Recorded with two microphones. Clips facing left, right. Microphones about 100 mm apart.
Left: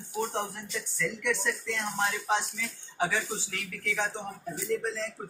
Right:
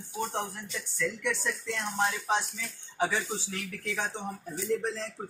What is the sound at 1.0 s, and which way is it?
A man's voice, centre (ahead or behind).